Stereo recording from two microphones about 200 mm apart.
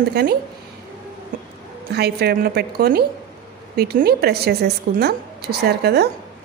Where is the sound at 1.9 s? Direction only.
55° right (ahead or behind).